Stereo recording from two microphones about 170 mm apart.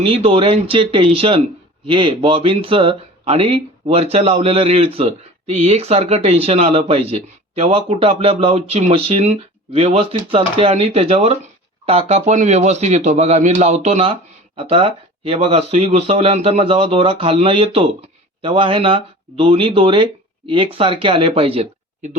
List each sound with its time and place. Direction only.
0.0 s speech: 35° right (ahead or behind)